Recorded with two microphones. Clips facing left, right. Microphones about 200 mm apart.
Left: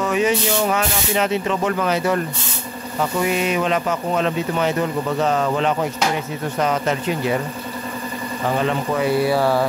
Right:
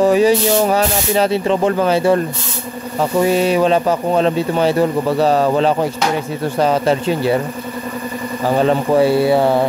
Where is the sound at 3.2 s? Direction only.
35° right (ahead or behind).